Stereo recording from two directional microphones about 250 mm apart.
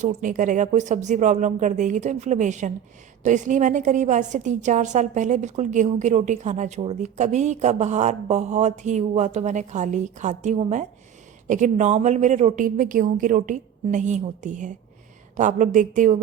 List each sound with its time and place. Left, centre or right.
0.0 s a woman's voice: right